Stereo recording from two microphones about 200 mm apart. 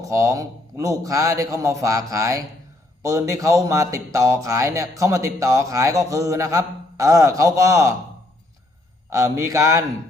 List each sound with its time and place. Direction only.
0.0 s speech: 15° right (ahead or behind)
9.0 s speech: 15° right (ahead or behind)